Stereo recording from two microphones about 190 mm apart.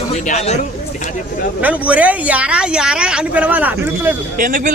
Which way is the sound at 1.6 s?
5° right (ahead or behind).